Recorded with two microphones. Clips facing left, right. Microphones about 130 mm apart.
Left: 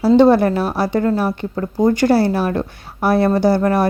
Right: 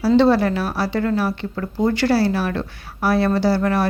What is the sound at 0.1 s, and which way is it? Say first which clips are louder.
Speech: left 4 dB; 50° left (ahead or behind).